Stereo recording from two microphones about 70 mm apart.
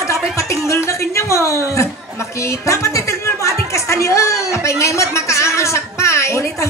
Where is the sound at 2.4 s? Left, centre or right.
Left.